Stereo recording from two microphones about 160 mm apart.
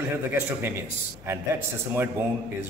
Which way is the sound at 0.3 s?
15° right (ahead or behind).